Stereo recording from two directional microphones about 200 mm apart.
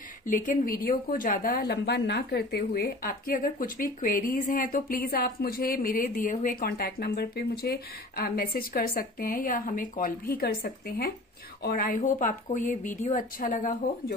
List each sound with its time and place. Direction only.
0.3 s a woman's voice: 40° left (ahead or behind)